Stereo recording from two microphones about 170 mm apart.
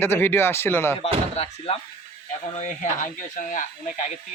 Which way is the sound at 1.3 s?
35° left (ahead or behind).